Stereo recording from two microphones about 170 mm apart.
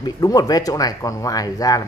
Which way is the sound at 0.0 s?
25° left (ahead or behind).